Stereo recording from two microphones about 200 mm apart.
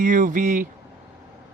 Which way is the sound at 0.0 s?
40° right (ahead or behind).